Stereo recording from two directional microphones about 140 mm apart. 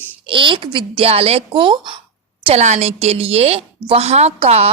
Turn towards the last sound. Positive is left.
turn(degrees=-45)  # may be behind; listen again after turning